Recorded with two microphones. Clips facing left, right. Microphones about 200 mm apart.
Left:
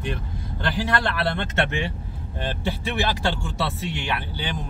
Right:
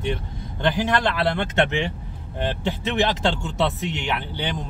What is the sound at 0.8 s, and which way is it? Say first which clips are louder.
A woman's voice: even; 20° right (ahead or behind).